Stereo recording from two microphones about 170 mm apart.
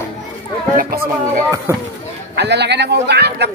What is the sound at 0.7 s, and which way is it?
Speech, 60° right (ahead or behind).